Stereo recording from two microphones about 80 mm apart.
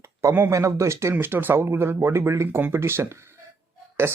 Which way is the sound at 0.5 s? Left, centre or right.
Right.